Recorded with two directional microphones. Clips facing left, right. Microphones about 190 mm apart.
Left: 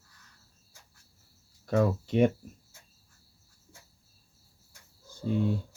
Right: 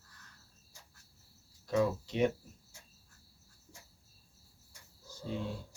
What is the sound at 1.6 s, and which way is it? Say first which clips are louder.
Cricket: left 4 dB; 55° left (ahead or behind).